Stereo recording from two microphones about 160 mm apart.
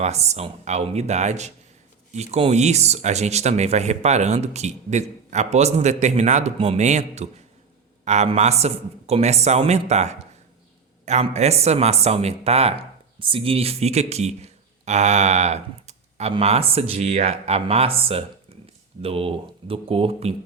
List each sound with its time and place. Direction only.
0.0 s speech: 45° right (ahead or behind)